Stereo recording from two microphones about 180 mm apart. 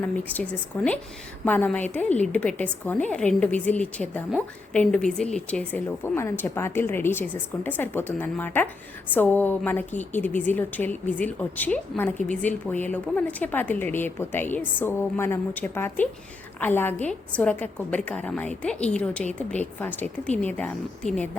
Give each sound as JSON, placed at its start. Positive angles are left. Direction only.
{"t": 0.0, "sound": "a woman's voice", "side_deg": 10}
{"t": 12.1, "sound": "a woman's voice", "side_deg": 45}
{"t": 12.4, "sound": "a woman's voice", "side_deg": 10}